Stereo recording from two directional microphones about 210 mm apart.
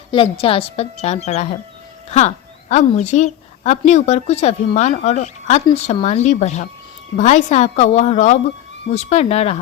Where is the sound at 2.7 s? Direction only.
35° left (ahead or behind).